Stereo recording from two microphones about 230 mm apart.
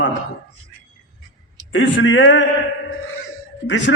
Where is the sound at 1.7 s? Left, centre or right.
Left.